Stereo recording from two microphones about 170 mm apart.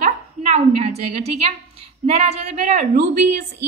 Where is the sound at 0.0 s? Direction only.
45° right (ahead or behind).